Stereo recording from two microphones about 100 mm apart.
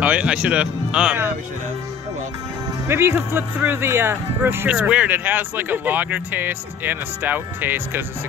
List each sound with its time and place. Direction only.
0.0 s speech: 15° right (ahead or behind)
2.9 s speech: 20° right (ahead or behind)